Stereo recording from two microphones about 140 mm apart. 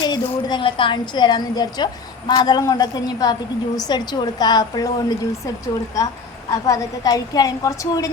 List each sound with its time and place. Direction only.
0.0 s a woman's voice: 30° left (ahead or behind)
6.5 s a woman's voice: 25° left (ahead or behind)